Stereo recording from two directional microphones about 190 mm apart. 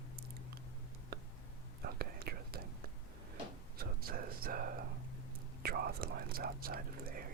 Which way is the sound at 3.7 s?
50° right (ahead or behind).